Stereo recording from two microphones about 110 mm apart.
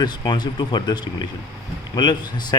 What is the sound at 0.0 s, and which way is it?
A man's voice, 40° left (ahead or behind).